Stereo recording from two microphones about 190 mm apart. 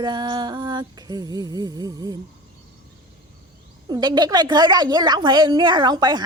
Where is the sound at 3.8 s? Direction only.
20° right (ahead or behind).